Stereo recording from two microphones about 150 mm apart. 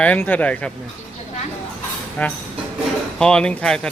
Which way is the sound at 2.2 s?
10° left (ahead or behind).